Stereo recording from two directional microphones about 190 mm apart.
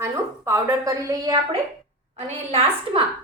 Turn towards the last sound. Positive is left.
turn(degrees=-30)  # may be behind; listen again after turning